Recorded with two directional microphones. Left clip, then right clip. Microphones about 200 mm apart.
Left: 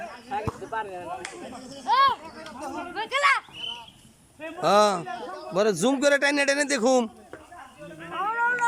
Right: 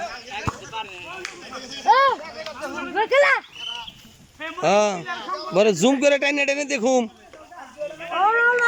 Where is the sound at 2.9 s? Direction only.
40° right (ahead or behind).